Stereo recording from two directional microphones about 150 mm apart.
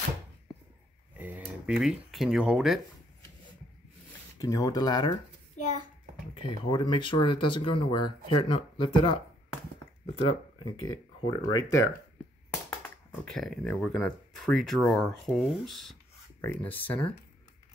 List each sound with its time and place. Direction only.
1.1 s a sound: 10° right (ahead or behind)
1.7 s speech: centre (ahead or behind)
4.4 s speech: 20° left (ahead or behind)
6.4 s speech: 35° left (ahead or behind)
12.6 s speech: 10° left (ahead or behind)
16.3 s speech: 10° left (ahead or behind)